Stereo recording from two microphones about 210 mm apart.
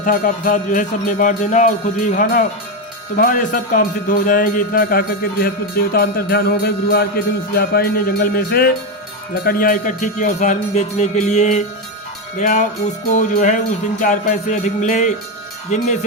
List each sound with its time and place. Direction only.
0.0 s music: 40° left (ahead or behind)
5.9 s speech: 45° left (ahead or behind)
9.4 s music: 45° left (ahead or behind)